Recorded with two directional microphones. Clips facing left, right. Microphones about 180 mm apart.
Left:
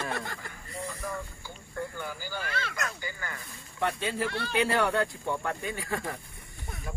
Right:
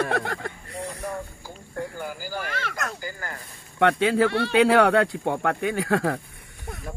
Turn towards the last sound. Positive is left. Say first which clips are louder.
# right 10 dB
turn(degrees=-75)  # may be behind; listen again after turning